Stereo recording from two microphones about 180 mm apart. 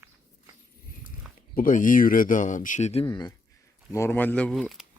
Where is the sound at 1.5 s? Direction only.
50° left (ahead or behind).